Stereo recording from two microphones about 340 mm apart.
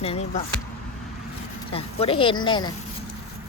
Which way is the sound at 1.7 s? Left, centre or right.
Centre.